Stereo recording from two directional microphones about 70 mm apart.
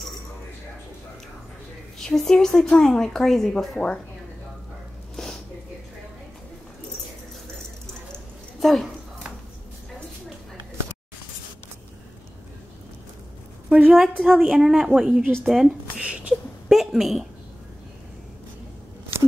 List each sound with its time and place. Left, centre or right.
2.0 s a woman's voice: centre
3.7 s speech: centre
8.5 s a woman's voice: centre
13.7 s a woman's voice: centre
16.0 s a sound: centre
16.6 s a woman's voice: centre